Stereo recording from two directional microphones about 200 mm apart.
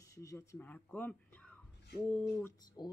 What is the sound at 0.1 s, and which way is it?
Speech, 15° left (ahead or behind).